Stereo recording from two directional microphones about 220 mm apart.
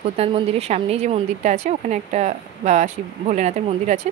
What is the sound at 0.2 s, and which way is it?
A woman's voice, 25° right (ahead or behind).